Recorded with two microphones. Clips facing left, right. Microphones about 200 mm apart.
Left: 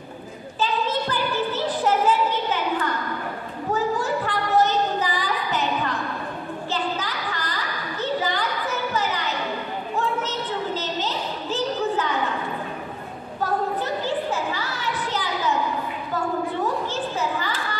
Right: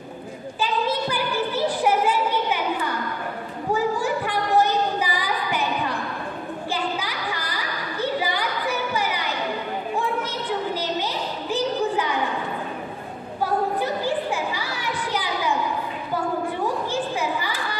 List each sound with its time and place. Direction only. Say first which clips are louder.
0.6 s a sound: even; 10° right (ahead or behind)
13.4 s children playing: right 1 dB; 10° right (ahead or behind)
16.9 s children playing: right 1 dB; 10° right (ahead or behind)